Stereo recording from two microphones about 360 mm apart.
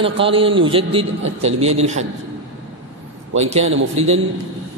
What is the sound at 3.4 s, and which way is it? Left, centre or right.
Speech, centre.